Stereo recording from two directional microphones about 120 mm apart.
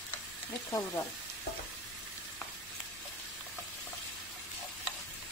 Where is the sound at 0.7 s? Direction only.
20° left (ahead or behind).